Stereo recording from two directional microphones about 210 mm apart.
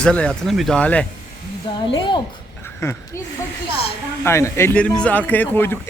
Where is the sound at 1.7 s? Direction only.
25° left (ahead or behind).